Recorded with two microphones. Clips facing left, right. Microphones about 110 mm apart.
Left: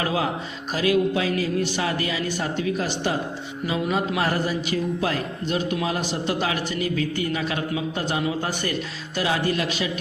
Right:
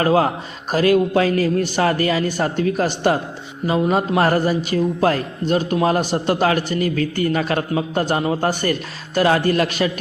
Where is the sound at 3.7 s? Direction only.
40° right (ahead or behind).